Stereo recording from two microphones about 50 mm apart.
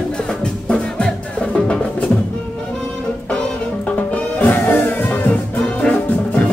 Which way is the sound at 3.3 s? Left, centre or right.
Left.